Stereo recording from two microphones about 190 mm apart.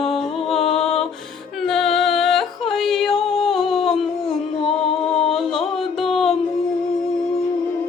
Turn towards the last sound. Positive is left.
turn(degrees=0)  # may be behind; listen again after turning